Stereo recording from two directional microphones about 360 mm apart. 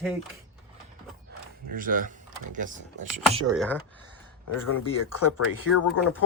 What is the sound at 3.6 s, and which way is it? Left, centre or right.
Speech, centre.